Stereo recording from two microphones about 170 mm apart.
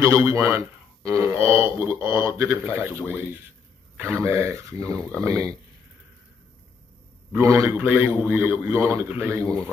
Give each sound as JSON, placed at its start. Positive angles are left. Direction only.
{"t": 0.0, "sound": "a man's voice", "side_deg": -15}
{"t": 7.3, "sound": "a man's voice", "side_deg": -15}